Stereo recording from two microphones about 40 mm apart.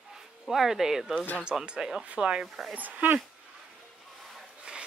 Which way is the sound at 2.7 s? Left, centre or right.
Right.